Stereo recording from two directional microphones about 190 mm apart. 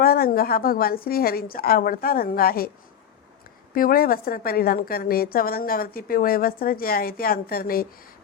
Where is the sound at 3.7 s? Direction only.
50° left (ahead or behind).